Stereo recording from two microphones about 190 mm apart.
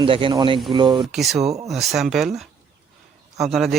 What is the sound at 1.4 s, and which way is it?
Speech, 35° right (ahead or behind).